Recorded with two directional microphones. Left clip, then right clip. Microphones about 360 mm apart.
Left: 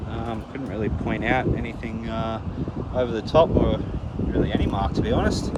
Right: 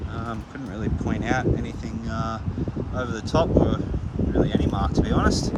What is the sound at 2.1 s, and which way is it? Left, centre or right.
Speech, centre.